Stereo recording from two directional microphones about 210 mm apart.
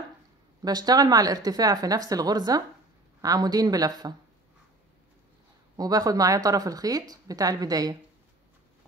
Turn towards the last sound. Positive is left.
turn(degrees=-15)  # may be behind; listen again after turning